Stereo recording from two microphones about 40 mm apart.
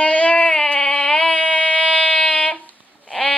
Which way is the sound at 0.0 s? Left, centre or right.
Left.